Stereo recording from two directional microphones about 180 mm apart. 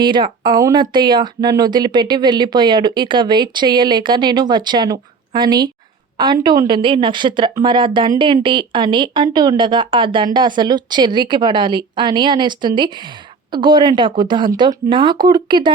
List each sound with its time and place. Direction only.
0.0 s speech: 25° right (ahead or behind)